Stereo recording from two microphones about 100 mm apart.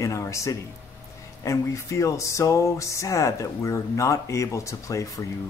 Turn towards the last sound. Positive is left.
turn(degrees=30)  # may be behind; listen again after turning